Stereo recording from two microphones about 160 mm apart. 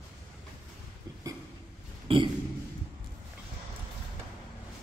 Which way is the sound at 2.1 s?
35° right (ahead or behind).